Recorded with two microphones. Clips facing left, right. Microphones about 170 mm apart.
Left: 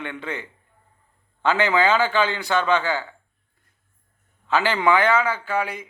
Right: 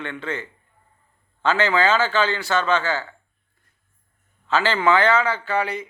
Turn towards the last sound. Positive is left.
turn(degrees=10)  # may be behind; listen again after turning